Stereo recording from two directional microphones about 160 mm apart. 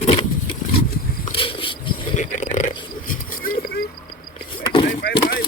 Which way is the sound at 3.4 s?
65° left (ahead or behind).